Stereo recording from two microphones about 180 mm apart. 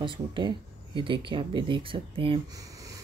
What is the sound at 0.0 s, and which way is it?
Speech, 25° right (ahead or behind).